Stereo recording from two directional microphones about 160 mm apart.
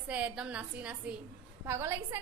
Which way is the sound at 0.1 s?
10° right (ahead or behind).